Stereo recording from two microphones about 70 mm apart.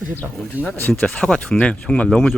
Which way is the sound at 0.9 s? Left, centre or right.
Centre.